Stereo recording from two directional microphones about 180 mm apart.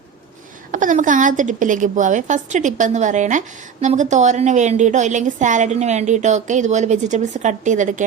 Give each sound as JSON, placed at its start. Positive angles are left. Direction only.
{"t": 0.7, "sound": "a woman's voice", "side_deg": -45}